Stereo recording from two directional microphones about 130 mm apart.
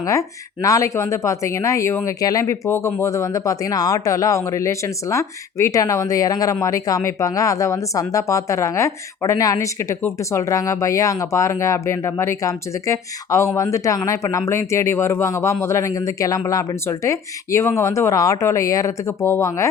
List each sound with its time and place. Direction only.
0.0 s speech: 25° left (ahead or behind)